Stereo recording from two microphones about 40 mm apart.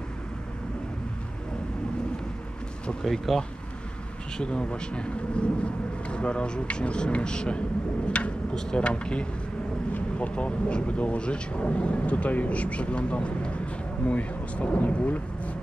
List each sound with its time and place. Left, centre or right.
3.3 s speech: centre
4.4 s speech: left
8.5 s speech: left